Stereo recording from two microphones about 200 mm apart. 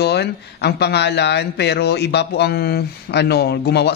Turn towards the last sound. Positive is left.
turn(degrees=55)  # may be behind; listen again after turning